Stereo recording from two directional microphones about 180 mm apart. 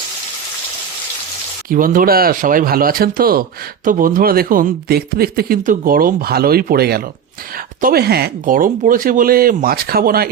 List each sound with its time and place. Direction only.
1.7 s speech: 50° right (ahead or behind)